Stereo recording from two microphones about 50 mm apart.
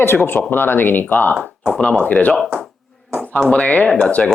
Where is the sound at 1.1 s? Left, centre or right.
Left.